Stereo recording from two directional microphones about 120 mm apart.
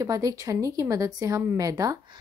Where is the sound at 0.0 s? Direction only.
30° right (ahead or behind).